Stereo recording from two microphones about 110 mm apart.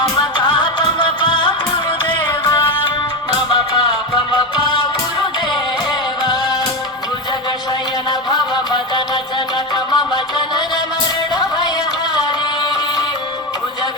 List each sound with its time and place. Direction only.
0.2 s music: 45° left (ahead or behind)
8.3 s music: 40° left (ahead or behind)